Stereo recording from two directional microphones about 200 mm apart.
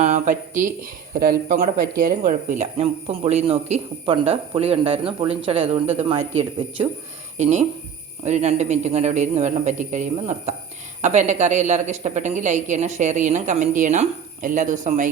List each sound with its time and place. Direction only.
0.0 s speech: 40° right (ahead or behind)